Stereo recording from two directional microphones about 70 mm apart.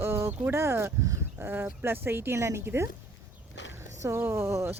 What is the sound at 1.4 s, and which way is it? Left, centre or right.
Speech, right.